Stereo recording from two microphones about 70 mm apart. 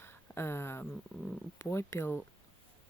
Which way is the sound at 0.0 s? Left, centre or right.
Left.